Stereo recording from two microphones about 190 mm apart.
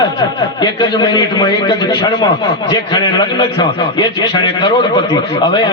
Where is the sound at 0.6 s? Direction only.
25° left (ahead or behind).